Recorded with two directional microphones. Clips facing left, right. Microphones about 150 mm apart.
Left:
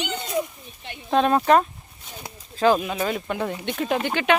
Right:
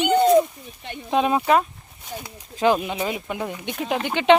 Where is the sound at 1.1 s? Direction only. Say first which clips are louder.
Left 1 dB; 10° right (ahead or behind).